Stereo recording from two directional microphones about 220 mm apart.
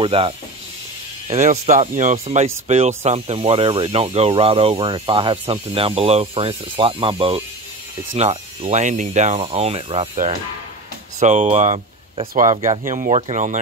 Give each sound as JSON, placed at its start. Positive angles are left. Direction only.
{"t": 0.0, "sound": "speech", "side_deg": -25}
{"t": 12.4, "sound": "speech", "side_deg": -15}
{"t": 12.8, "sound": "speech", "side_deg": -35}